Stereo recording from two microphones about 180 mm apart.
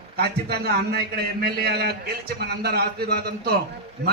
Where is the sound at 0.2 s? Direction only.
60° right (ahead or behind).